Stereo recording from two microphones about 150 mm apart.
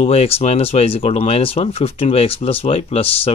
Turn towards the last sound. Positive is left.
turn(degrees=40)  # may be behind; listen again after turning